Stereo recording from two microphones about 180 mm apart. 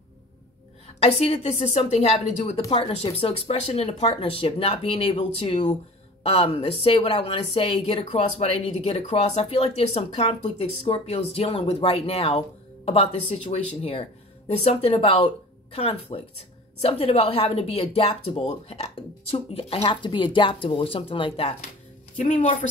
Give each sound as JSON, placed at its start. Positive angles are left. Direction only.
{"t": 0.8, "sound": "speech", "side_deg": 30}
{"t": 22.4, "sound": "speech", "side_deg": 40}